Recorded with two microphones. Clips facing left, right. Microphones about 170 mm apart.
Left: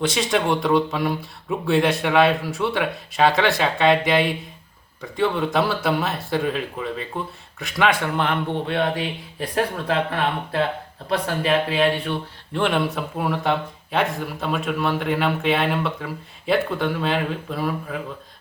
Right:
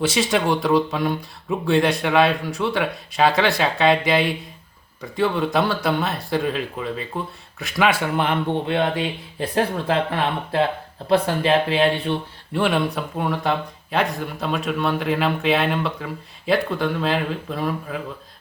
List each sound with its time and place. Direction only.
0.0 s speech: 5° right (ahead or behind); by 9.9 s 25° right (ahead or behind)
11.1 s speech: 25° right (ahead or behind)
12.5 s speech: centre (ahead or behind)